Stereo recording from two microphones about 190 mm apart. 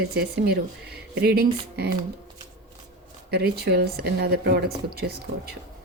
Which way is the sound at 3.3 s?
55° right (ahead or behind).